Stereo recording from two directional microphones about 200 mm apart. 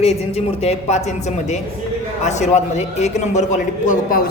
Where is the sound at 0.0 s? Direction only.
30° left (ahead or behind).